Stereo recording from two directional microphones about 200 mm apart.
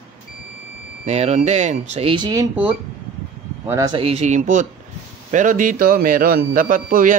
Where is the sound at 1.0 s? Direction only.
35° right (ahead or behind).